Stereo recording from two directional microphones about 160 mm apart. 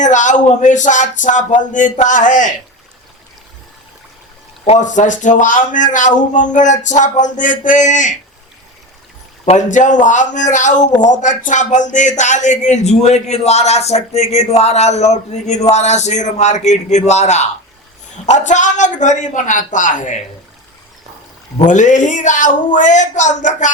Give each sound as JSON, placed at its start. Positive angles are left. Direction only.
{"t": 0.0, "sound": "speech", "side_deg": 50}
{"t": 4.6, "sound": "speech", "side_deg": 45}
{"t": 9.5, "sound": "speech", "side_deg": 50}
{"t": 21.6, "sound": "speech", "side_deg": 50}